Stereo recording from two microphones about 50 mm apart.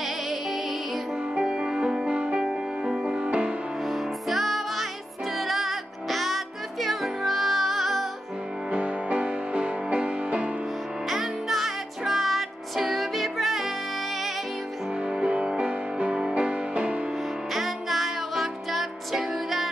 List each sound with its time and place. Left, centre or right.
0.0 s music: centre
1.3 s music: centre
3.8 s music: centre
8.6 s music: right
11.1 s music: centre
15.0 s music: centre
17.5 s music: centre